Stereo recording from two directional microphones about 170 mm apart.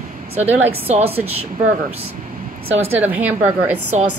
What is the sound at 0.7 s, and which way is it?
Speech, 35° right (ahead or behind).